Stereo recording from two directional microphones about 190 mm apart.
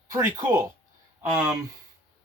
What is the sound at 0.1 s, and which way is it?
Speech, 15° right (ahead or behind).